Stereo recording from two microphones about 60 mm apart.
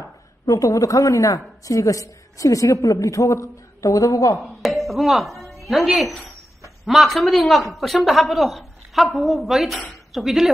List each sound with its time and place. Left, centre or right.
0.5 s a woman's voice: left
4.4 s a woman's voice: centre